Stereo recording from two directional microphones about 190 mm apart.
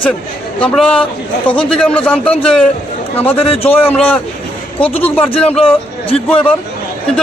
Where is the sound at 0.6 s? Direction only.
5° left (ahead or behind).